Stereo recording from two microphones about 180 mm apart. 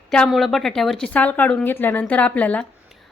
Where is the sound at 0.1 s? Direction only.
5° left (ahead or behind).